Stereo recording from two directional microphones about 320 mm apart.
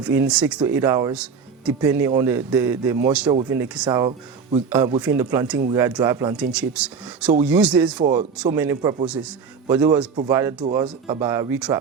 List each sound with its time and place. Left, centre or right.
0.0 s speech: centre
8.0 s speech: centre
8.4 s speech: centre